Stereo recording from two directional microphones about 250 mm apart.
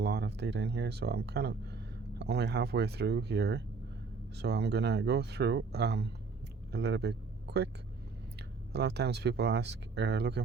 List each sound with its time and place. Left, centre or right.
0.0 s speech: right
8.7 s speech: right